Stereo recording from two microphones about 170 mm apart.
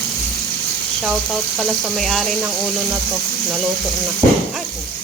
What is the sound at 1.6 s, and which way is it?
Speech, centre (ahead or behind).